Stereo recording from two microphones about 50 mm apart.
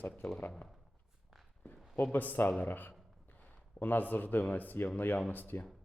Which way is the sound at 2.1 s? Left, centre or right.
Left.